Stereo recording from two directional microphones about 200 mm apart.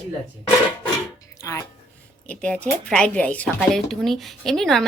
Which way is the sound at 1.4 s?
15° left (ahead or behind).